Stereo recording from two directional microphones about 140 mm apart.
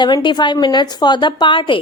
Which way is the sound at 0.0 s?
35° left (ahead or behind).